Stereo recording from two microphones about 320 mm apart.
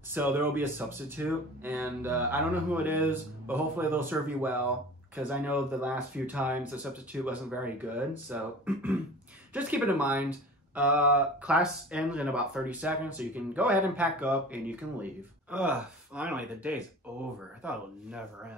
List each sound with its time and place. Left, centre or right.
0.1 s speech: centre